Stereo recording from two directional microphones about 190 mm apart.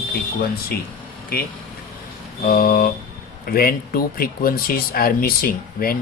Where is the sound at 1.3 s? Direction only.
50° left (ahead or behind).